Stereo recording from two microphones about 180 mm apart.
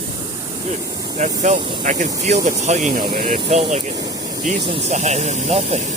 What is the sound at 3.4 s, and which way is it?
Speech, 35° right (ahead or behind).